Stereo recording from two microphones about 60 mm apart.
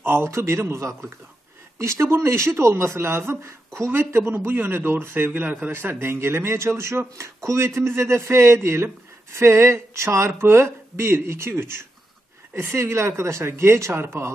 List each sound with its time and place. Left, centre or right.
0.0 s a man's voice: right